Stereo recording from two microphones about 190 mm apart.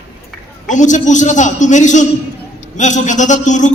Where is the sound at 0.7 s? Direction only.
40° left (ahead or behind).